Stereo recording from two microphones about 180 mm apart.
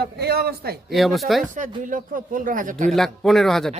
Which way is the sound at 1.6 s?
45° right (ahead or behind).